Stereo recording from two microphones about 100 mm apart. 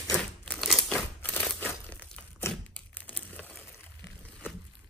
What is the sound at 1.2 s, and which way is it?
Crunch, 15° left (ahead or behind).